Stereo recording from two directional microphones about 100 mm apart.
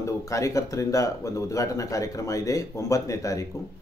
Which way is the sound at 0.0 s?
30° left (ahead or behind).